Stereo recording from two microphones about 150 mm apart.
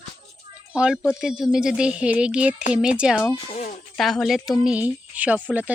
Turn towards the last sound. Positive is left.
turn(degrees=-10)  # may be behind; listen again after turning